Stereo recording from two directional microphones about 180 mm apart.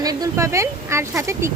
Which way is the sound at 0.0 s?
20° right (ahead or behind).